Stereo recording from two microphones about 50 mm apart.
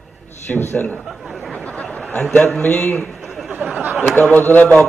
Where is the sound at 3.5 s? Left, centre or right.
Right.